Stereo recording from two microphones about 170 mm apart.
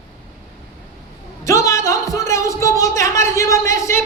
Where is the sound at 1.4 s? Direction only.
20° left (ahead or behind).